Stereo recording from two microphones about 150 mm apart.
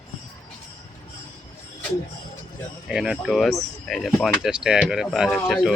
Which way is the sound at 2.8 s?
5° right (ahead or behind).